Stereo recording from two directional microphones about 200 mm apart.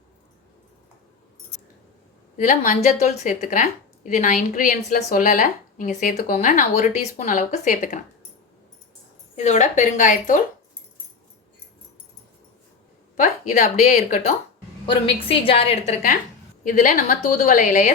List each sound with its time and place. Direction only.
2.4 s speech: 40° left (ahead or behind)
9.3 s speech: 35° left (ahead or behind)
13.1 s speech: 45° left (ahead or behind)
14.8 s a woman's voice: 25° left (ahead or behind)
16.6 s a woman's voice: 40° left (ahead or behind)